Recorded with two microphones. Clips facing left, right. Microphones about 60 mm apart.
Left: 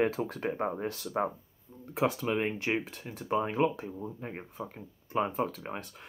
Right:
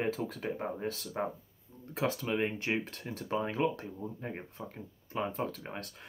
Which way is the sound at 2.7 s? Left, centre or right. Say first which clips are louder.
Left 2 dB; centre.